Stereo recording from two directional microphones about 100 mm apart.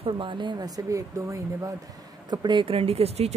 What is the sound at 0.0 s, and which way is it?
Speech, 55° right (ahead or behind).